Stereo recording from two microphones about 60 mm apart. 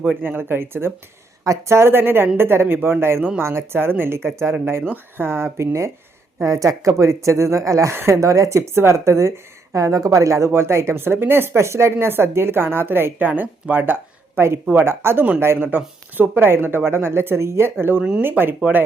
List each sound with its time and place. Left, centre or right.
0.2 s a woman's voice: right
11.5 s a woman's voice: right
14.3 s a woman's voice: right